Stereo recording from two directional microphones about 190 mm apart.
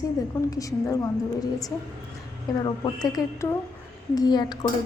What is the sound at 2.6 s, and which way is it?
A woman's voice, 20° left (ahead or behind).